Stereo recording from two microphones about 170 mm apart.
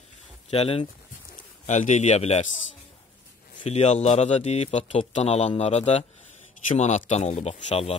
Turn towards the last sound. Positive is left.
turn(degrees=35)  # may be behind; listen again after turning